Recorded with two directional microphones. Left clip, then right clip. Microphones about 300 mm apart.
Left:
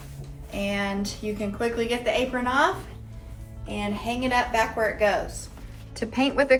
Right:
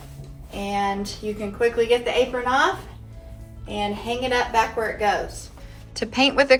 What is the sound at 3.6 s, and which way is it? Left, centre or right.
Speech, centre.